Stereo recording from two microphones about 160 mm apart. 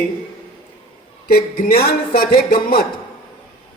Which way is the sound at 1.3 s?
75° left (ahead or behind).